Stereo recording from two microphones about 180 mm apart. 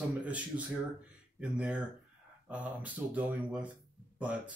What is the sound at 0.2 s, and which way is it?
Speech, 5° right (ahead or behind).